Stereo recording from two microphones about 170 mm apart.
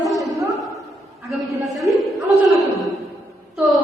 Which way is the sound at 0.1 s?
Centre (ahead or behind).